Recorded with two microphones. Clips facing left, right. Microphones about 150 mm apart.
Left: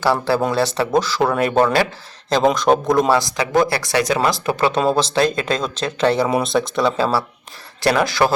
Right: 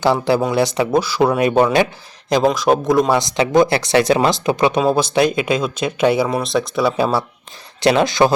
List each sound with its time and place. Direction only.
0.0 s speech: 20° right (ahead or behind)
2.5 s speech: centre (ahead or behind)
3.1 s speech: 20° right (ahead or behind)
6.2 s speech: centre (ahead or behind)
6.9 s speech: 20° right (ahead or behind)